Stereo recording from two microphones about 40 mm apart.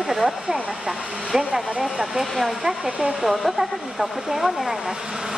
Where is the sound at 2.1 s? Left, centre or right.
Centre.